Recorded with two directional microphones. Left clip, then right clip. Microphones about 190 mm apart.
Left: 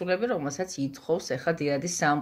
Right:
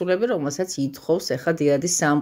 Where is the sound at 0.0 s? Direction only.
60° right (ahead or behind).